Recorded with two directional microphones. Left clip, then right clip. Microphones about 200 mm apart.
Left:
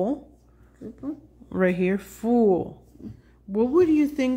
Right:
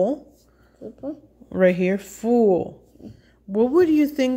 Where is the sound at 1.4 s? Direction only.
10° right (ahead or behind).